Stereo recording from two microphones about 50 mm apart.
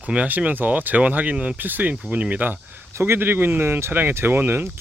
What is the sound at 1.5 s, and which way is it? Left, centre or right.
Speech, right.